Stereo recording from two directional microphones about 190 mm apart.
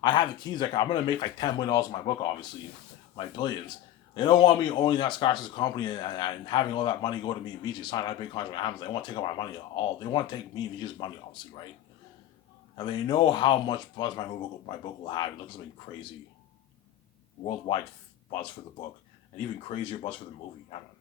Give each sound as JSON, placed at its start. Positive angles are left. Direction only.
{"t": 0.0, "sound": "a man's voice", "side_deg": 25}
{"t": 12.7, "sound": "a man's voice", "side_deg": 25}
{"t": 17.4, "sound": "a man's voice", "side_deg": 25}
{"t": 19.6, "sound": "a man's voice", "side_deg": 30}